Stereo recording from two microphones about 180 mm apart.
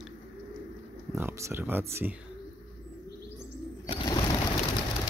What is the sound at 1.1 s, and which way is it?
Speech, 15° right (ahead or behind).